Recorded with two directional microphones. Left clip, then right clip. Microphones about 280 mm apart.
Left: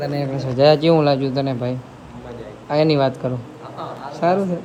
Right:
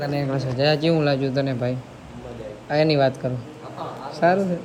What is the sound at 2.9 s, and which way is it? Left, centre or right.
Speech, left.